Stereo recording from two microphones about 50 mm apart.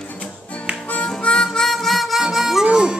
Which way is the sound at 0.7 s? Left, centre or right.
Centre.